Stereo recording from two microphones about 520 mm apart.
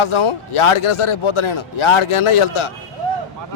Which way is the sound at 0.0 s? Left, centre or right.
Left.